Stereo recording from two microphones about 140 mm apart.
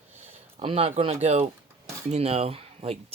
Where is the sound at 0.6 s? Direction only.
45° right (ahead or behind).